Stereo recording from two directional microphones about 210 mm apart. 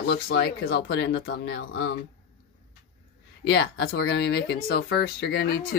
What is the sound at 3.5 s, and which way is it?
Speech, 50° left (ahead or behind).